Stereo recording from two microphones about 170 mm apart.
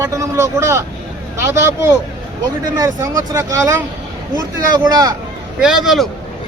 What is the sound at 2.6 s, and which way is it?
Speech, 20° right (ahead or behind).